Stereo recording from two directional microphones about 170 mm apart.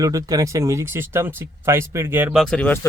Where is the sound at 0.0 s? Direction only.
20° right (ahead or behind).